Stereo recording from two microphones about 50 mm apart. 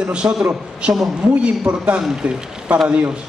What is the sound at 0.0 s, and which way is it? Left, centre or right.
A man's voice, right.